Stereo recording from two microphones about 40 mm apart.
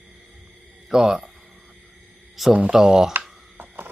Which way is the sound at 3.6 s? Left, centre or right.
Right.